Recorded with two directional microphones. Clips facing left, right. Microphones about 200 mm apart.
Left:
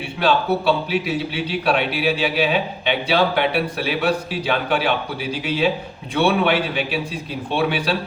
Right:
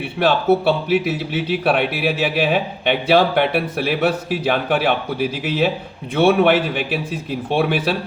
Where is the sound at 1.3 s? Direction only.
50° right (ahead or behind).